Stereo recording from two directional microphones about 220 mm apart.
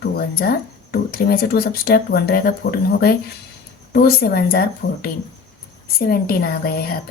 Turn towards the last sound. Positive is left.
turn(degrees=45)  # may be behind; listen again after turning